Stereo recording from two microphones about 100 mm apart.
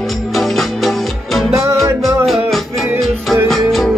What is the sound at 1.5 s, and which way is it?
Music, 35° right (ahead or behind).